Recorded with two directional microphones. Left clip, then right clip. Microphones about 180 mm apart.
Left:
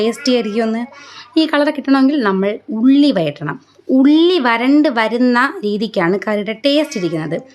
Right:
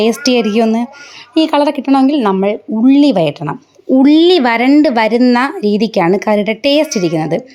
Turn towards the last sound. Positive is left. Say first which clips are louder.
# right 5 dB
turn(degrees=-20)  # may be behind; listen again after turning